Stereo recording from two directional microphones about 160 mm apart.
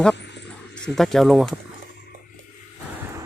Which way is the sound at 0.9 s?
Centre (ahead or behind).